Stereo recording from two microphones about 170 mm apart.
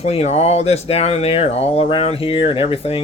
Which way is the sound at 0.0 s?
40° left (ahead or behind).